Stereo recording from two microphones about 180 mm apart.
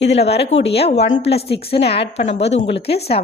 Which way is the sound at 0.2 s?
35° left (ahead or behind).